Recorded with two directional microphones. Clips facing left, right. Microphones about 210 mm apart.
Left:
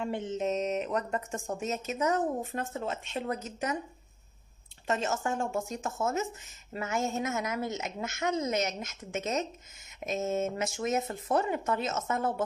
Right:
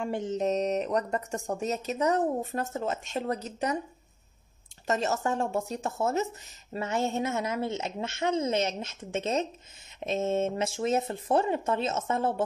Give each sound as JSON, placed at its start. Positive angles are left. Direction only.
{"t": 0.0, "sound": "speech", "side_deg": -45}
{"t": 4.8, "sound": "a woman's voice", "side_deg": -40}